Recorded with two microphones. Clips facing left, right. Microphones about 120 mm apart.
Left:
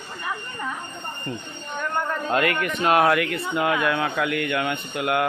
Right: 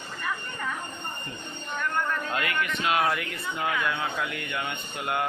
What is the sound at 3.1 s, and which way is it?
Speech, 75° left (ahead or behind).